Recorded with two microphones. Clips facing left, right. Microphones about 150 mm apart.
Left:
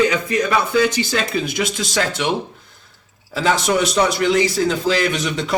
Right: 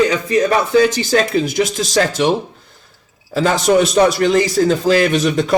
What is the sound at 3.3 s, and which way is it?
A man's voice, 45° right (ahead or behind).